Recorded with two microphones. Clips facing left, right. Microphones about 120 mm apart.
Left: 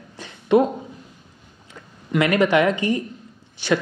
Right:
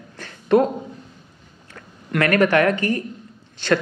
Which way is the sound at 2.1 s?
15° left (ahead or behind).